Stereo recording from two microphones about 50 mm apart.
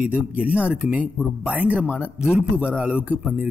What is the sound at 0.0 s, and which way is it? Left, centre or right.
Speech, right.